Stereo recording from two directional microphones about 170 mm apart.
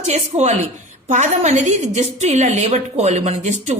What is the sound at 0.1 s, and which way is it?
A woman's voice, 40° right (ahead or behind).